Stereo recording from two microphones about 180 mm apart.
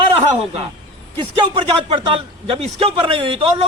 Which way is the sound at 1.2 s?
30° right (ahead or behind).